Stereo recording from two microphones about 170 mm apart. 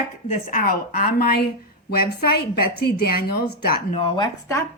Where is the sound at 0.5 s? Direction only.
60° left (ahead or behind).